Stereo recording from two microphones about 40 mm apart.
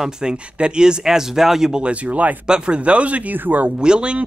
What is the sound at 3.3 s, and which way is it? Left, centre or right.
Speech, right.